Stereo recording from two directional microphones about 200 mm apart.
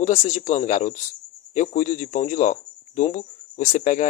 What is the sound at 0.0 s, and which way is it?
Speech, 35° left (ahead or behind).